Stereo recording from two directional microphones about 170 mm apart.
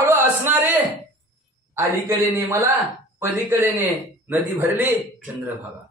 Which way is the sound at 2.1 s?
15° right (ahead or behind).